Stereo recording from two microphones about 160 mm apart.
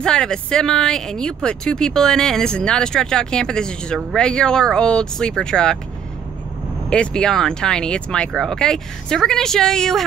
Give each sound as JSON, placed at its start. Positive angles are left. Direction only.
{"t": 0.0, "sound": "a woman's voice", "side_deg": 5}
{"t": 6.9, "sound": "a woman's voice", "side_deg": 5}